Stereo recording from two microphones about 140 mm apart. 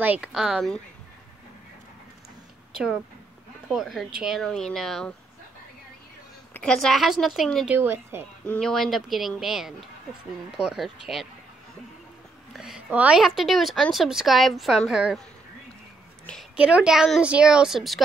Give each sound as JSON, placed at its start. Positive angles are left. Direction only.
{"t": 0.0, "sound": "a woman's voice", "side_deg": -10}
{"t": 3.6, "sound": "a woman's voice", "side_deg": 0}
{"t": 6.5, "sound": "a woman's voice", "side_deg": 5}
{"t": 7.6, "sound": "speech", "side_deg": -15}
{"t": 8.5, "sound": "a woman's voice", "side_deg": 5}
{"t": 12.5, "sound": "a woman's voice", "side_deg": -5}
{"t": 16.5, "sound": "a woman's voice", "side_deg": -10}